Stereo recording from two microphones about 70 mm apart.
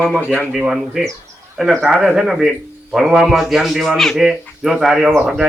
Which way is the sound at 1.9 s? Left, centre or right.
Centre.